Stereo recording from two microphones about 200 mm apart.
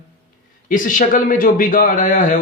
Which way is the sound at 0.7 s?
40° left (ahead or behind).